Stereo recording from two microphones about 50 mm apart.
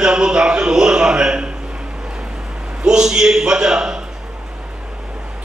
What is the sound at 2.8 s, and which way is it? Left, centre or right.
A man's voice, centre.